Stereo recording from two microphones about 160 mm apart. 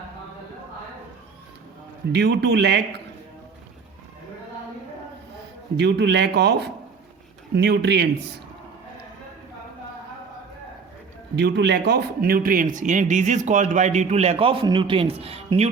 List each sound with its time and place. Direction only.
2.1 s a man's voice: 90° right
5.7 s a man's voice: 90° right
11.3 s speech: 90° right; by 15.7 s 40° right (ahead or behind)